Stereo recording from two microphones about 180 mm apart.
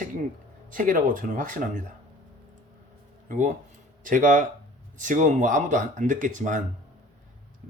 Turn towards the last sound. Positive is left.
turn(degrees=-45)  # may be behind; listen again after turning